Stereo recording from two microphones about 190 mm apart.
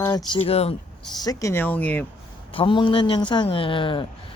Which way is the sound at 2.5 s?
25° left (ahead or behind).